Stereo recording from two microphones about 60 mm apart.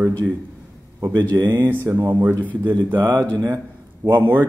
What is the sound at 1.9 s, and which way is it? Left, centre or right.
Speech, right.